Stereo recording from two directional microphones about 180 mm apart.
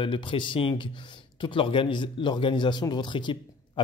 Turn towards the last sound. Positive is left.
turn(degrees=25)  # may be behind; listen again after turning